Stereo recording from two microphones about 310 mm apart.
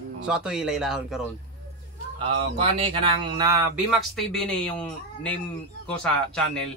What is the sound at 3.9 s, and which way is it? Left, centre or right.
Speech, centre.